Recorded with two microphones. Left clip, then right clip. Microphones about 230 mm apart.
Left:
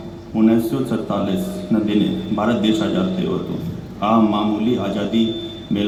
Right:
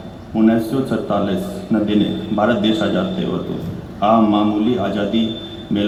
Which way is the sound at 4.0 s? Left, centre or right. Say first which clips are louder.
Right 3 dB; left.